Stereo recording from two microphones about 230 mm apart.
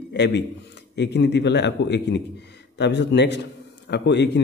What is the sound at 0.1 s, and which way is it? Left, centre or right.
A man's voice, left.